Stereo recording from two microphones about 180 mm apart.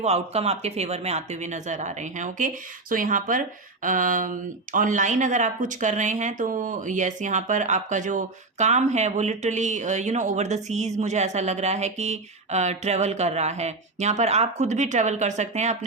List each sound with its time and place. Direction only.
0.0 s speech: 35° right (ahead or behind)